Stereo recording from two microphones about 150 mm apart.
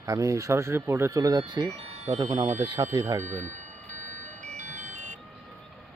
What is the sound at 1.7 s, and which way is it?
Speech, 45° right (ahead or behind).